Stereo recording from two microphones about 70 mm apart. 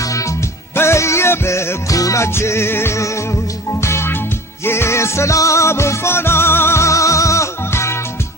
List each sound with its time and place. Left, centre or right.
0.0 s music: left